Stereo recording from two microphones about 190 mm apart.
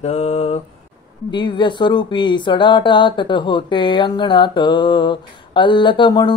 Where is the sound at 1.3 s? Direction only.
25° left (ahead or behind).